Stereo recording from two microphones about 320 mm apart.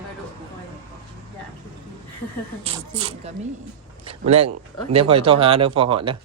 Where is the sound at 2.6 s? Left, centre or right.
Centre.